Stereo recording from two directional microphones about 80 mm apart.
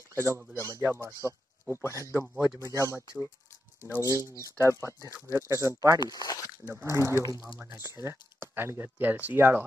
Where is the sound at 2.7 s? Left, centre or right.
Right.